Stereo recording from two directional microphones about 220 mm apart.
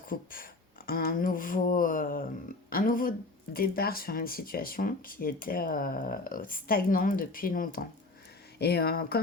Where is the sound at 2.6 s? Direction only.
40° left (ahead or behind).